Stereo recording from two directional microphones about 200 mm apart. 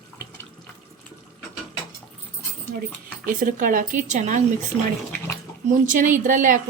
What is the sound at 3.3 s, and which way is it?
A woman's voice, 45° right (ahead or behind).